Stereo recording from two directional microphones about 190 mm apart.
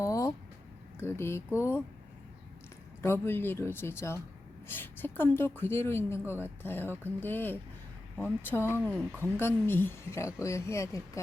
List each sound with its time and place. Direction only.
0.0 s a sound: 15° left (ahead or behind)
0.9 s speech: 15° left (ahead or behind)
3.0 s speech: 10° left (ahead or behind)